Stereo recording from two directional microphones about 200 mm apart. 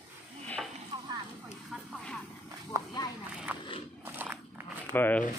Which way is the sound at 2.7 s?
15° right (ahead or behind).